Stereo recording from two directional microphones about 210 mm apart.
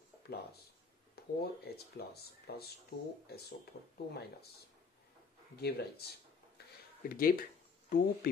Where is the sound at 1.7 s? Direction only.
50° left (ahead or behind).